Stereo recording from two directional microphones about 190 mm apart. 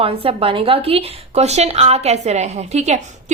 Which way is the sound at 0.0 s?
30° right (ahead or behind).